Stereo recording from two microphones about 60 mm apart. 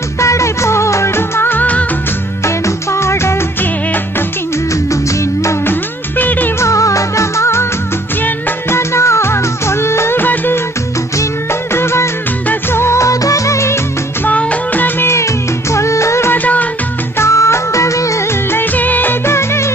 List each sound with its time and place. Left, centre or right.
0.2 s music: left
2.4 s music: left
5.7 s music: left
6.6 s music: left
11.7 s music: left
13.0 s music: left
14.2 s music: left
15.0 s music: left
17.2 s music of bollywood: left
18.5 s music of bollywood: left
19.2 s music: left